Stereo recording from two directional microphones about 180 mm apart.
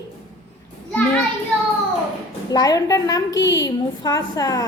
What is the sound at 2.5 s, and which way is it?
A woman's voice, 20° left (ahead or behind).